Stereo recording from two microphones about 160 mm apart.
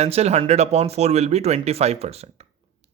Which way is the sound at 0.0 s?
45° right (ahead or behind).